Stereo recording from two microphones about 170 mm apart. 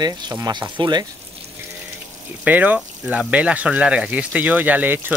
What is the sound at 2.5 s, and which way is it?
Speech, 10° right (ahead or behind).